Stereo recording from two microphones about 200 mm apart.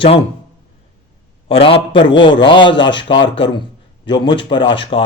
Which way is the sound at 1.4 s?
25° left (ahead or behind).